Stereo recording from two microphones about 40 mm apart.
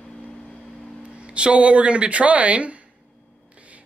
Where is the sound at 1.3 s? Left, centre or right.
Right.